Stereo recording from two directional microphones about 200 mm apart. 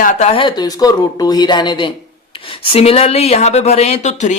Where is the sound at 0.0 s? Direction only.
35° left (ahead or behind).